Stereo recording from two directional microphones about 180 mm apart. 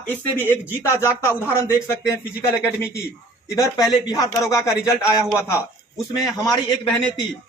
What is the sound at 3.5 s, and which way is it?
Speech, 15° left (ahead or behind).